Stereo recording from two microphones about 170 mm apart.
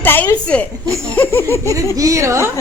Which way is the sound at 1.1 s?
10° left (ahead or behind).